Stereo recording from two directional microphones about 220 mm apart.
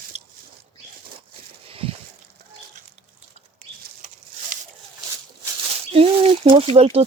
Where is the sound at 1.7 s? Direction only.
25° right (ahead or behind).